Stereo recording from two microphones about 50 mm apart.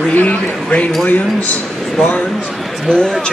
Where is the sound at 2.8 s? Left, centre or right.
Centre.